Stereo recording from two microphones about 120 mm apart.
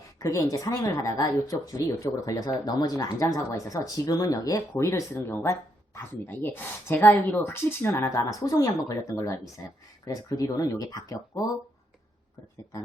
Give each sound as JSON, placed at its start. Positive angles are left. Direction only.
{"t": 0.2, "sound": "speech", "side_deg": 30}